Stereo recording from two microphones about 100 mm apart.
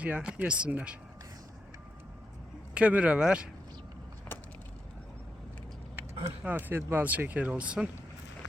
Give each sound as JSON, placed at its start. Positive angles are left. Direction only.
{"t": 0.0, "sound": "speech", "side_deg": -10}
{"t": 2.7, "sound": "speech", "side_deg": -10}
{"t": 6.4, "sound": "speech", "side_deg": -20}